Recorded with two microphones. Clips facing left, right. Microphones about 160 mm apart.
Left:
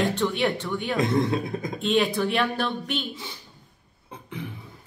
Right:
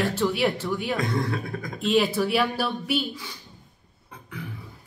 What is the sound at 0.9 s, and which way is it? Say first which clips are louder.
Speech: left 8 dB; 20° left (ahead or behind).